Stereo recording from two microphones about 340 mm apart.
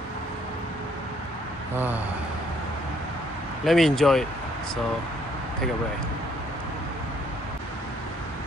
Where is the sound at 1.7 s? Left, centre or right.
Centre.